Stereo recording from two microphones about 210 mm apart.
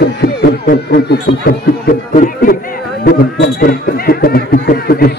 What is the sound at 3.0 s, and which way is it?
A man's voice, 50° left (ahead or behind).